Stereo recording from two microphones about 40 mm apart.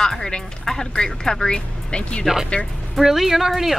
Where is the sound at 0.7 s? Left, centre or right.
Centre.